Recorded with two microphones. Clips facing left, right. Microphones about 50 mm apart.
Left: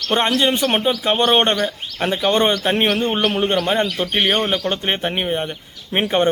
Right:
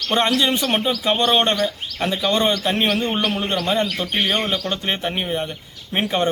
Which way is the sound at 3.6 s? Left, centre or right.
Left.